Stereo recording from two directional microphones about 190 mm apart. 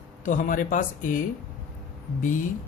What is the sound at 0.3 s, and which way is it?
Speech, 45° left (ahead or behind).